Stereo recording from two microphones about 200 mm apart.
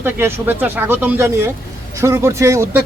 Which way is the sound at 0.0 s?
10° right (ahead or behind).